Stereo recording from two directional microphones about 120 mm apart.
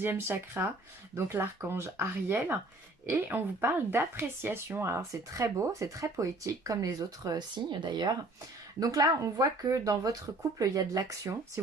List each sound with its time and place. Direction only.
0.0 s speech: 20° right (ahead or behind)